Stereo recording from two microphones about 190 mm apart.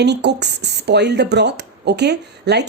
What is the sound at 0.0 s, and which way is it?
Speech, 65° right (ahead or behind).